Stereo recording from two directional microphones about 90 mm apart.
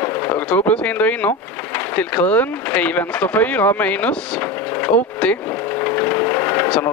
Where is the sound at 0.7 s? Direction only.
15° left (ahead or behind).